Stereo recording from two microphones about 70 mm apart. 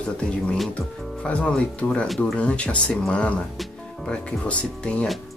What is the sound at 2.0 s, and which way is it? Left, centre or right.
Speech, centre.